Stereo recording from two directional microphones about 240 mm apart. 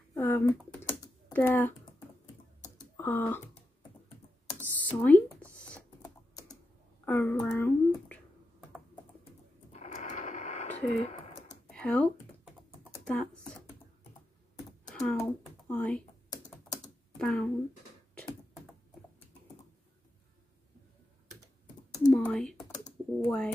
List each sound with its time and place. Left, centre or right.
0.1 s typing: centre
1.3 s speech: centre
3.0 s speech: centre
4.6 s a sound: centre
7.1 s speech: centre
9.7 s radio: left
11.6 s computer keyboard: centre
13.1 s computer keyboard: centre
14.9 s typing: centre
15.7 s computer keyboard: centre
17.2 s a sound: centre
22.1 s typing: centre
22.7 s typing: centre